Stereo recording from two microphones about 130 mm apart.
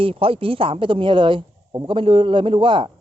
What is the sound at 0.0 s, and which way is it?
A man's voice, 45° right (ahead or behind).